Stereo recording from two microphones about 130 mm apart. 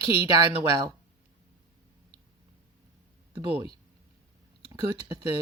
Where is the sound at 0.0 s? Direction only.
45° left (ahead or behind).